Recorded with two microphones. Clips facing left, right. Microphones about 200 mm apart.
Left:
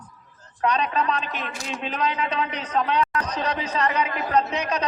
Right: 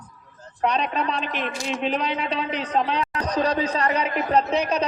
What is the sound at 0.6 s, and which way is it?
A man's voice, 30° right (ahead or behind).